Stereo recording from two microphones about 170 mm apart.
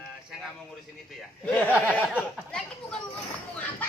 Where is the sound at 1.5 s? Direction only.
10° left (ahead or behind).